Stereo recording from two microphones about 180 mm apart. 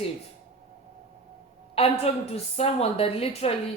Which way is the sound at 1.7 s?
35° left (ahead or behind).